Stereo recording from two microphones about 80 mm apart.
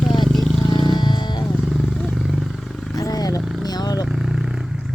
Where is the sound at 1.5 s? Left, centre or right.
Centre.